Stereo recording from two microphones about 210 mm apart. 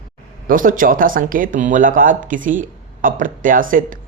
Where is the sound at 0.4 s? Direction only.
40° right (ahead or behind).